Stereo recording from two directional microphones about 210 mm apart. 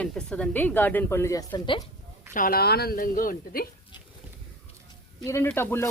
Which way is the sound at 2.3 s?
45° left (ahead or behind).